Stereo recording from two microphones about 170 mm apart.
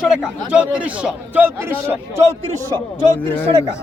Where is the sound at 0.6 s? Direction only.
5° right (ahead or behind).